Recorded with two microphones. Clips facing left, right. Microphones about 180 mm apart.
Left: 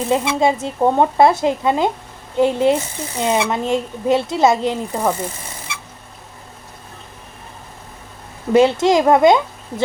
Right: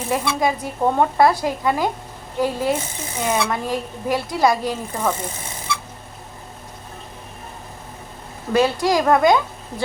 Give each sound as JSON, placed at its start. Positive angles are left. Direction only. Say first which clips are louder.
{"t": 0.1, "sound": "a woman's voice", "louder": "left 3 dB", "side_deg": 25}
{"t": 8.5, "sound": "a woman's voice", "louder": "left 5 dB", "side_deg": 25}